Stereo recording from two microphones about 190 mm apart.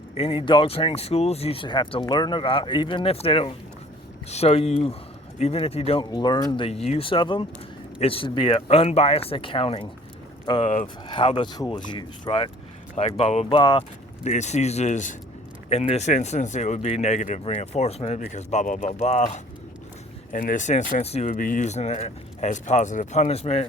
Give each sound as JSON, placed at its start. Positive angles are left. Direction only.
{"t": 0.1, "sound": "speech", "side_deg": 30}
{"t": 14.3, "sound": "speech", "side_deg": 35}